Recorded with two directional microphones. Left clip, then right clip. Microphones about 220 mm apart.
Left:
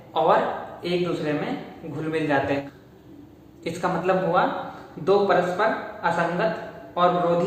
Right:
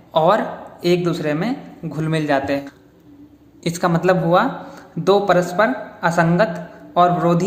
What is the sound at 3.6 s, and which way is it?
Speech, 55° right (ahead or behind).